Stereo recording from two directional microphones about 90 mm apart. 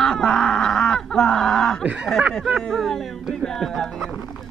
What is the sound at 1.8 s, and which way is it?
Speech, 15° right (ahead or behind).